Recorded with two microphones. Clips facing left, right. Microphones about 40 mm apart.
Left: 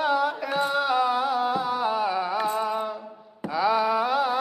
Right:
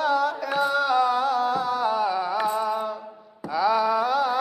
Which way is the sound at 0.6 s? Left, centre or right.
Centre.